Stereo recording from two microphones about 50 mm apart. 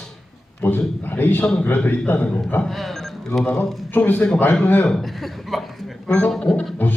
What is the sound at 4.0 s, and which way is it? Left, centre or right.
Speech, left.